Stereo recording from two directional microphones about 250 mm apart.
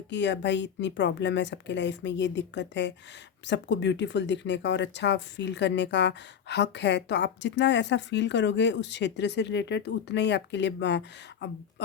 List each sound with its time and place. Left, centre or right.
0.1 s speech: left